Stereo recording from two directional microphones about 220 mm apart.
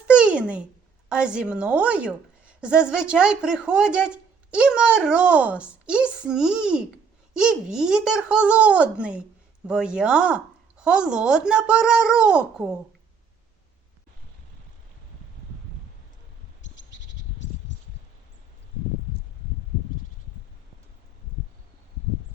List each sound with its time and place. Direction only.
0.2 s babbling: 5° right (ahead or behind)
1.1 s a woman's voice: 5° right (ahead or behind)
16.6 s a sound: 55° left (ahead or behind)